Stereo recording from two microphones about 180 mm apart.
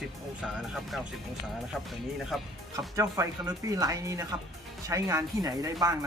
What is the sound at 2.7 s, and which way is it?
Speech, 20° right (ahead or behind).